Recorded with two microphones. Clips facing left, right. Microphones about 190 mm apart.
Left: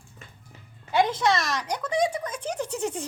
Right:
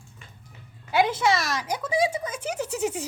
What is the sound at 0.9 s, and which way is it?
Speech, 5° right (ahead or behind).